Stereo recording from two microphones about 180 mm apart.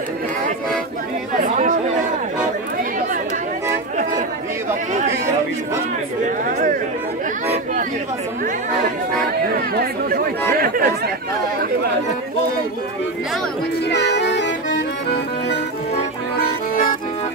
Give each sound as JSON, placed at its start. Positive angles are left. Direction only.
{"t": 1.4, "sound": "speech", "side_deg": -45}
{"t": 6.2, "sound": "chatter", "side_deg": -50}
{"t": 9.8, "sound": "speech", "side_deg": -55}
{"t": 13.8, "sound": "accordion", "side_deg": 70}